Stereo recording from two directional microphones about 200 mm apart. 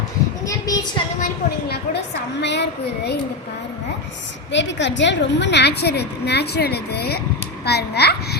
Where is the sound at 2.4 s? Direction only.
60° left (ahead or behind).